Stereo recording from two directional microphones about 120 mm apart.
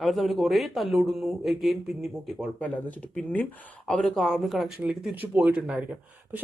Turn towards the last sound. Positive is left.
turn(degrees=-10)  # may be behind; listen again after turning